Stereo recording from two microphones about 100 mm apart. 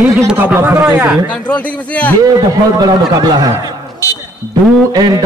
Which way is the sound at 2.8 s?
40° right (ahead or behind).